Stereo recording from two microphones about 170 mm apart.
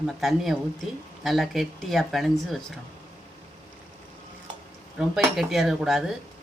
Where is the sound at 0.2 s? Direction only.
Centre (ahead or behind).